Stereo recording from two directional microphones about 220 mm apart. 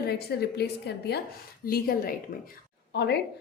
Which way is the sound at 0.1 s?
45° left (ahead or behind).